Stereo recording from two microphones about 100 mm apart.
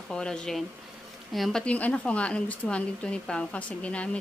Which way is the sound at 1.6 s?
15° left (ahead or behind).